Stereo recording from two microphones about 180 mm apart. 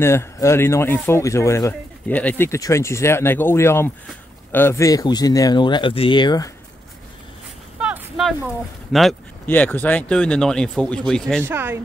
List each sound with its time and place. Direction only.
0.0 s speech: 15° left (ahead or behind)
7.8 s a sound: 5° right (ahead or behind)
8.9 s speech: centre (ahead or behind)
9.5 s speech: 10° left (ahead or behind)
11.4 s speech: 10° right (ahead or behind)